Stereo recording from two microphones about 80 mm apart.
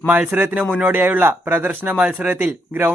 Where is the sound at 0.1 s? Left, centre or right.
Right.